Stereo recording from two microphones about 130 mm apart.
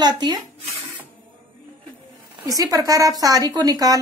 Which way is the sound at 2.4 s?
25° right (ahead or behind).